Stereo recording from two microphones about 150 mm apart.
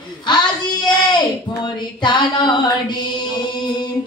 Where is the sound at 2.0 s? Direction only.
30° left (ahead or behind).